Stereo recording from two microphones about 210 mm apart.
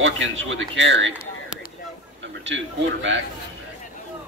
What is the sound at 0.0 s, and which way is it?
Speech, 65° right (ahead or behind).